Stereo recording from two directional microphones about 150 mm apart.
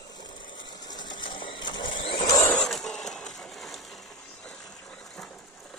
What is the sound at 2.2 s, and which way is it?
Vehicle, 25° left (ahead or behind).